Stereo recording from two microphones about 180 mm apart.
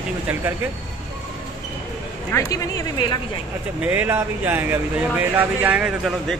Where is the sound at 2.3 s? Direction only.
20° left (ahead or behind).